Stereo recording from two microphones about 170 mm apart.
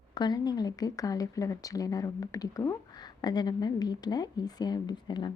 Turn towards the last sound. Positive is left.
turn(degrees=25)  # may be behind; listen again after turning